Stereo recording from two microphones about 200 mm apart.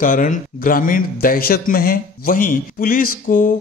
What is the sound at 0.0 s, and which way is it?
A man's voice, 40° left (ahead or behind).